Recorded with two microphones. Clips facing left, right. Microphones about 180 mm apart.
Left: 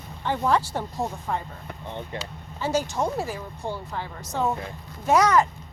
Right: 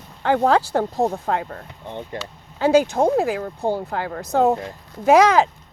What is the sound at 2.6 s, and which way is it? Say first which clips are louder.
Speech: right 9 dB; 60° right (ahead or behind).